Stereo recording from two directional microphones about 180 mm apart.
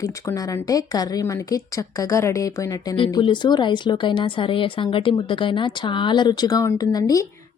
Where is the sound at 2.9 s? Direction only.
30° left (ahead or behind).